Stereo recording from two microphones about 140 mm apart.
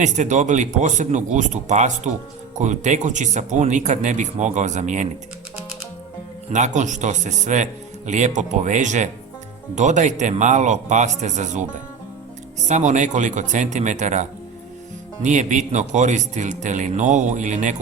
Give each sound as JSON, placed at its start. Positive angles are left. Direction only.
{"t": 0.0, "sound": "speech", "side_deg": -55}
{"t": 6.5, "sound": "speech", "side_deg": -60}
{"t": 12.6, "sound": "speech", "side_deg": -60}